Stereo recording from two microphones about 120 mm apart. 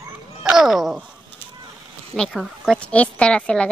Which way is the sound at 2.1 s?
Centre (ahead or behind).